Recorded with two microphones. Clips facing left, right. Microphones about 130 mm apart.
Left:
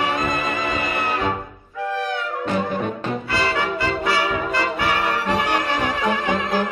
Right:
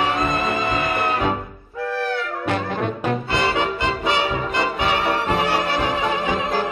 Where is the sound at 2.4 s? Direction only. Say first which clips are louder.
Left 1 dB; 65° right (ahead or behind).